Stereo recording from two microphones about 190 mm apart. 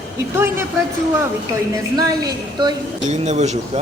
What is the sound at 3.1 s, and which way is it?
Speech, 35° right (ahead or behind).